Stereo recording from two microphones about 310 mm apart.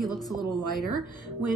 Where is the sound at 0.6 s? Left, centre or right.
Right.